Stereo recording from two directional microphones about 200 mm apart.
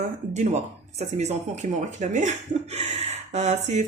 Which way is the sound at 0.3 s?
35° right (ahead or behind).